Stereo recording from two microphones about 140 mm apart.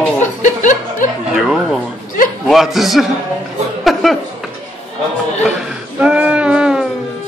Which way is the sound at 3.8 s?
Centre (ahead or behind).